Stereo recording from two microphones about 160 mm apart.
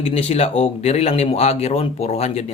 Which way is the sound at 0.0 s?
40° left (ahead or behind).